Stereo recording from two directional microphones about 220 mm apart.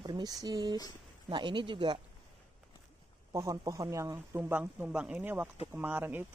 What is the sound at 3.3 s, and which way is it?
Speech, 15° right (ahead or behind).